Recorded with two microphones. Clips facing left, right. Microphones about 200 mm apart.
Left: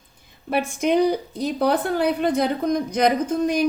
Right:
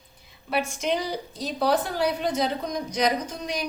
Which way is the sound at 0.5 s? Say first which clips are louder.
Left 6 dB; 55° left (ahead or behind).